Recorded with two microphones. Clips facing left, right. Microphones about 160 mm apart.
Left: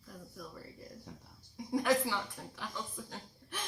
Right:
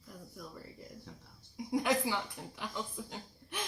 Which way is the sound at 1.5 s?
15° right (ahead or behind).